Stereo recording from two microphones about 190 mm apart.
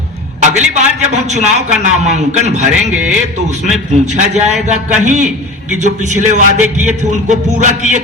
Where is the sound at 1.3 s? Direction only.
35° right (ahead or behind).